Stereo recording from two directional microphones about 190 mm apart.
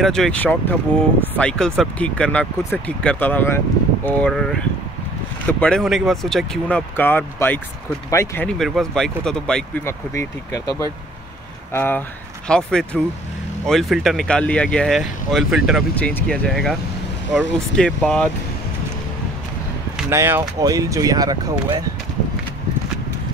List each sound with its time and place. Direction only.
0.0 s speech: 5° left (ahead or behind)
8.5 s speech: centre (ahead or behind)
10.1 s speech: 15° left (ahead or behind); by 15.8 s 5° right (ahead or behind)
16.0 s speech: 10° left (ahead or behind)
20.0 s speech: 10° right (ahead or behind)